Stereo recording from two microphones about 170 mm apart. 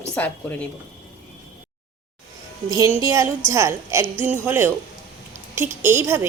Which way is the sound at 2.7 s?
15° right (ahead or behind).